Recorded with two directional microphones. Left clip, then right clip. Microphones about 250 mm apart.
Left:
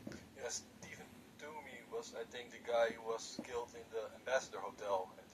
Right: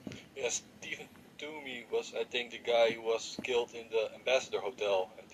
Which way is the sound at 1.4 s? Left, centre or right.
Right.